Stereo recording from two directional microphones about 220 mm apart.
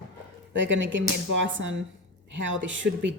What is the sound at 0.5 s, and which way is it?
Speech, 55° right (ahead or behind).